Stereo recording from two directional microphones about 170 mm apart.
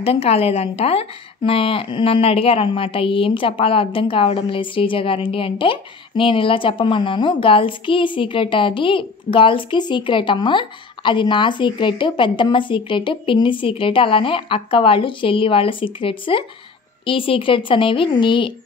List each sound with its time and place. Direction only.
0.0 s a woman's voice: 35° left (ahead or behind)